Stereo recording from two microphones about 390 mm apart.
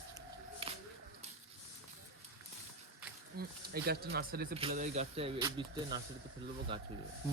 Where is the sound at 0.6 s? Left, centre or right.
Centre.